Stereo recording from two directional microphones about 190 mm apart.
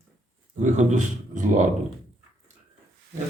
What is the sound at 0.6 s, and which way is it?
Speech, 40° right (ahead or behind).